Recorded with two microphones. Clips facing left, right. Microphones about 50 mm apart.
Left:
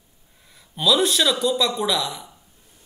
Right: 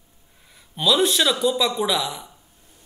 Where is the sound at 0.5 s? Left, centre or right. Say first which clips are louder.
Left 1 dB; centre.